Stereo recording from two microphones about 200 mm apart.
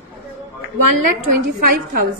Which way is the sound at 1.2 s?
45° right (ahead or behind).